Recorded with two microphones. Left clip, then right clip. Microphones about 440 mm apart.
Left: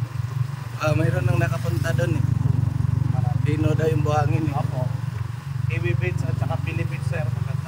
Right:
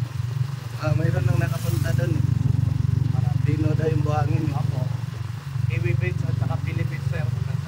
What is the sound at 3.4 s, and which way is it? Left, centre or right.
Vehicle, centre.